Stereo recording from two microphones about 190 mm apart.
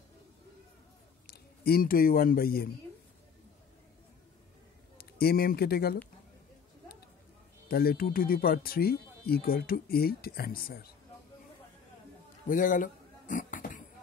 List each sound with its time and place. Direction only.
1.2 s speech: 55° left (ahead or behind)
4.9 s speech: 55° left (ahead or behind)
7.6 s speech: 55° left (ahead or behind)
12.4 s a sound: 45° left (ahead or behind)